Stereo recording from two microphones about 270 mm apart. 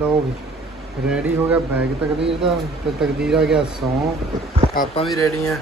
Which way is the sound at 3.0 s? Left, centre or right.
Centre.